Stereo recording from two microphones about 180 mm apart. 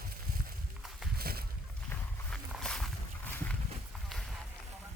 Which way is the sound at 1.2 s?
60° right (ahead or behind).